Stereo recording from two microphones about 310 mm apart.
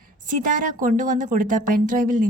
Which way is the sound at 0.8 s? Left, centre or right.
Right.